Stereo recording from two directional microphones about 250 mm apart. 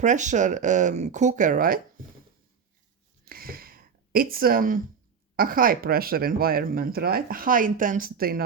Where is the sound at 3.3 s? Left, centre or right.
Right.